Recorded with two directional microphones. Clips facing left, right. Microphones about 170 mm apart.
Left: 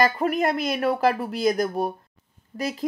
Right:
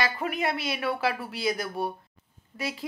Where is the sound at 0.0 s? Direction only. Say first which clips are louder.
Left 7 dB; 45° left (ahead or behind).